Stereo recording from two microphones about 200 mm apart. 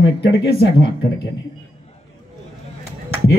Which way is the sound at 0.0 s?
55° left (ahead or behind).